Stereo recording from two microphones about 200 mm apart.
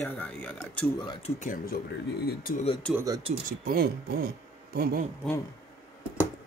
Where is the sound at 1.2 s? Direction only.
40° left (ahead or behind).